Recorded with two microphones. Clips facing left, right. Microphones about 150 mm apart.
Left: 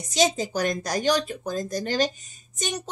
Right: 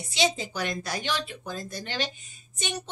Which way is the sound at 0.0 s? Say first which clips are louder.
Left 4 dB; 40° left (ahead or behind).